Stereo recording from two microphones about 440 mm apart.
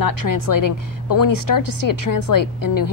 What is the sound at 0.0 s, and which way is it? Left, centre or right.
A woman's voice, left.